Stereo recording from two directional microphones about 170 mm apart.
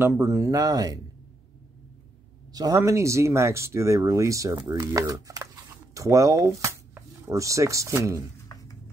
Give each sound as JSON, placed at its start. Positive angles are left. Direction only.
{"t": 0.0, "sound": "speech", "side_deg": -15}
{"t": 2.5, "sound": "speech", "side_deg": -20}